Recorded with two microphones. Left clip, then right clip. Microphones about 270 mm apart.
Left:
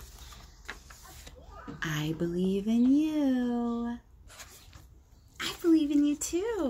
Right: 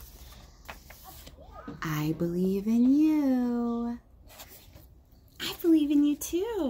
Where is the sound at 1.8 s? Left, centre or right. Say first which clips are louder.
Right 1 dB; centre.